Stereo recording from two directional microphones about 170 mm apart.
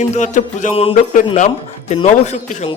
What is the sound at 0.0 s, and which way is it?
A man's voice, 45° left (ahead or behind).